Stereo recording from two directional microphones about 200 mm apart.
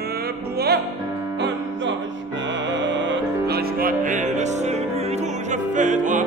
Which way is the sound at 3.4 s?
50° right (ahead or behind).